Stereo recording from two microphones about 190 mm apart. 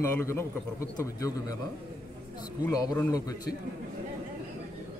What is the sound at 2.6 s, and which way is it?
Speech, 10° left (ahead or behind).